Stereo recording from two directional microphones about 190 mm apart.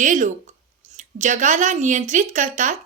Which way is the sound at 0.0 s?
40° right (ahead or behind).